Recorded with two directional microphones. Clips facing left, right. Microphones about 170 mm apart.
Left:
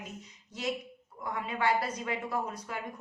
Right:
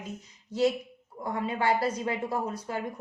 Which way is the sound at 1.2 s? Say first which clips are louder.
Right 3 dB; 35° right (ahead or behind).